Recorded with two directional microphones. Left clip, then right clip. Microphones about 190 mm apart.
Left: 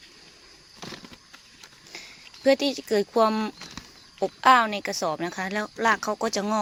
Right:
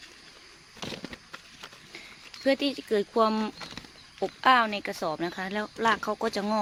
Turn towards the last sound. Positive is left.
turn(degrees=15)  # may be behind; listen again after turning